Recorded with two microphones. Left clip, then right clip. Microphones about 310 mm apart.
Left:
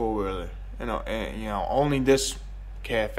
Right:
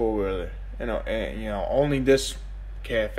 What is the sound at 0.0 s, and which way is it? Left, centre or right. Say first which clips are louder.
Speech: right 3 dB; centre.